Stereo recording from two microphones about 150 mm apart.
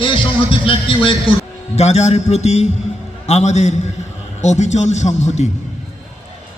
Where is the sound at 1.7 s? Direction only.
45° left (ahead or behind).